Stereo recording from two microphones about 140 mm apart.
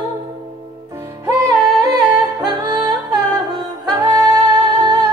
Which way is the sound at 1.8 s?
30° right (ahead or behind).